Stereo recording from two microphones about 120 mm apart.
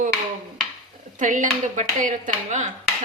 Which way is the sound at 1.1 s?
90° right.